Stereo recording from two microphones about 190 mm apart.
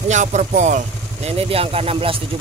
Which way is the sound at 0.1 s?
40° right (ahead or behind).